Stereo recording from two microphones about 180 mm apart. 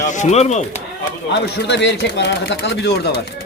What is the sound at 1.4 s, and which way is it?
Speech, 70° left (ahead or behind).